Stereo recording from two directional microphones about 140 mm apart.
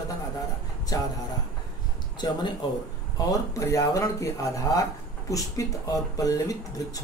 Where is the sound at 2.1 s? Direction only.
30° left (ahead or behind).